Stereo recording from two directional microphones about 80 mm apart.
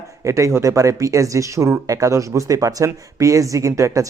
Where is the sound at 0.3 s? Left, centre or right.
Right.